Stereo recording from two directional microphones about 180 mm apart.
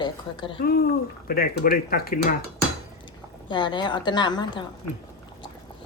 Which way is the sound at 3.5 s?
25° left (ahead or behind).